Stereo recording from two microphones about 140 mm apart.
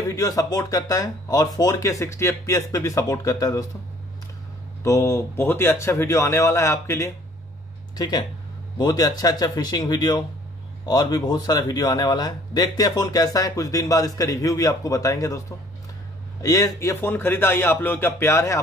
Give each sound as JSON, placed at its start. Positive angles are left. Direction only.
{"t": 0.1, "sound": "a man's voice", "side_deg": 25}
{"t": 4.8, "sound": "a man's voice", "side_deg": 20}